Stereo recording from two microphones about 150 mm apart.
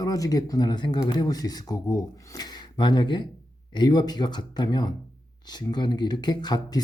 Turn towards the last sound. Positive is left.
turn(degrees=30)  # may be behind; listen again after turning